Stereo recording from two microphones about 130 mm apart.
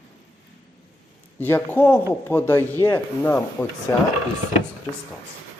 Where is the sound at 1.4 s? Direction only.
15° left (ahead or behind).